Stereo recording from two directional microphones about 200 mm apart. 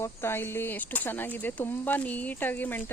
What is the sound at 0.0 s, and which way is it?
Speech, 10° left (ahead or behind).